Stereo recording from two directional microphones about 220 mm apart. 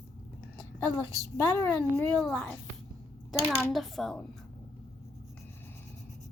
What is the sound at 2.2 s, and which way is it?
A woman's voice, centre (ahead or behind).